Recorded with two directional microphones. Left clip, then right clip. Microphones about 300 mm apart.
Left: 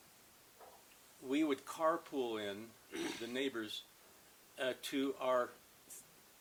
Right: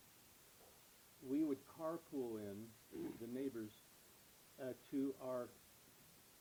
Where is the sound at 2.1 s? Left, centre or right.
Left.